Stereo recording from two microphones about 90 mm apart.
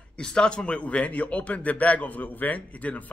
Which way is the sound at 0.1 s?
10° left (ahead or behind).